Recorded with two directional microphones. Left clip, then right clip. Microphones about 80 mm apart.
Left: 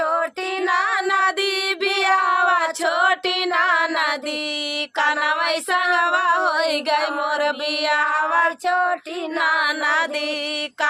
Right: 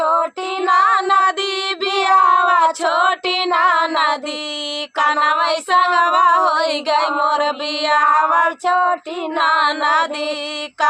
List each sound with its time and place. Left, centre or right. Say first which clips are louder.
0.7 s child singing: right 7 dB; left
2.8 s music: right 3 dB; left
4.9 s child singing: right 5 dB; left
8.6 s child singing: right 4 dB; right
9.4 s child singing: right 4 dB; left